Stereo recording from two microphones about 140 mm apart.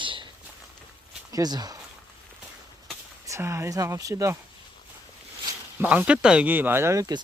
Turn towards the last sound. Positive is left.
turn(degrees=-20)  # may be behind; listen again after turning